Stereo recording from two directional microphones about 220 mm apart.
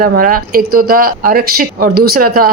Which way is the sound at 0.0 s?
40° right (ahead or behind).